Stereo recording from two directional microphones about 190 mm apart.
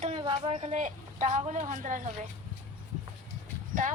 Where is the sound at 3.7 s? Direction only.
45° right (ahead or behind).